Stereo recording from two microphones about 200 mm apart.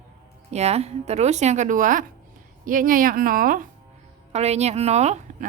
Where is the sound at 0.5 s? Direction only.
30° right (ahead or behind).